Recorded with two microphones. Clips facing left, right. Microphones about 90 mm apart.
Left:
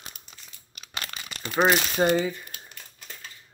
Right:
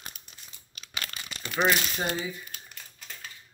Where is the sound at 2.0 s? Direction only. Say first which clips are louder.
Left 9 dB; 45° left (ahead or behind).